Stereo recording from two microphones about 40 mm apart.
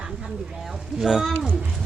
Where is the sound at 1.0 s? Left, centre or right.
Centre.